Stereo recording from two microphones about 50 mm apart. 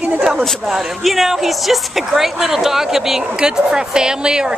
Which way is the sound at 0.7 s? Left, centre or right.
Centre.